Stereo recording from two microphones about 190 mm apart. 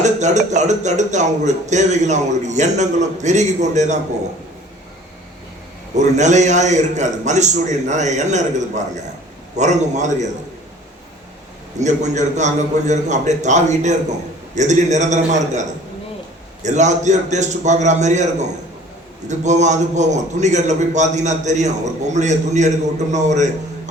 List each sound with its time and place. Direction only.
0.0 s speech: 40° right (ahead or behind)
6.0 s speech: 40° right (ahead or behind)
11.8 s speech: 40° right (ahead or behind)
16.6 s a man's voice: 40° right (ahead or behind)